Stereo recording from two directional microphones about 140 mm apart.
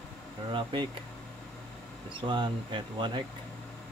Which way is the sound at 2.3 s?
35° right (ahead or behind).